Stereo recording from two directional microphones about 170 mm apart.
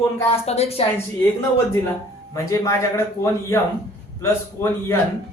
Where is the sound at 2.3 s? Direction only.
20° left (ahead or behind).